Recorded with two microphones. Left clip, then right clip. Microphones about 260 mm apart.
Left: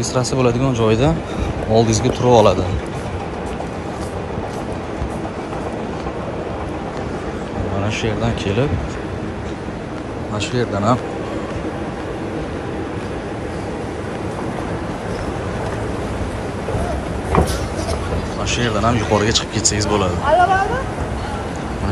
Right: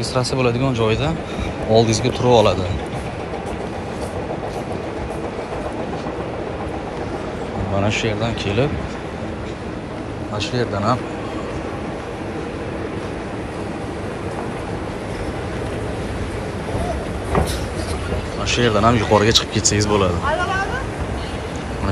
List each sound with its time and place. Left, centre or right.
0.1 s speech: centre
7.8 s speech: centre
10.5 s speech: centre
18.5 s speech: centre
20.2 s a sound: left